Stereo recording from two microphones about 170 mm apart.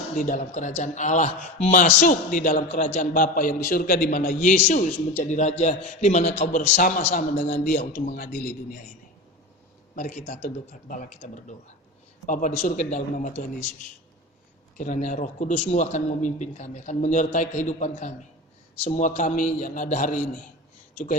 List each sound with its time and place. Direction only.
0.2 s speech: 50° left (ahead or behind)
9.9 s speech: 55° left (ahead or behind)
14.8 s speech: 45° left (ahead or behind)